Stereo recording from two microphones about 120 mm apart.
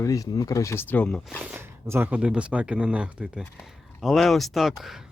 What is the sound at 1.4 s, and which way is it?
Speech, 15° right (ahead or behind).